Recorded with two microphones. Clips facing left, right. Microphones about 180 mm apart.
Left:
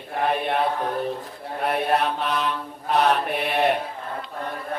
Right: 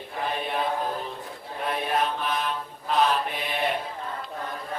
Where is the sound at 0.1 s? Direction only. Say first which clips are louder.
Left 6 dB; 65° left (ahead or behind).